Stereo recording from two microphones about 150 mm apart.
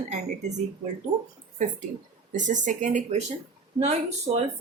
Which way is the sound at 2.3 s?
55° right (ahead or behind).